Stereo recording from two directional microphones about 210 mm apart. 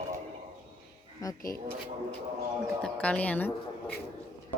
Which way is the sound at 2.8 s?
5° left (ahead or behind).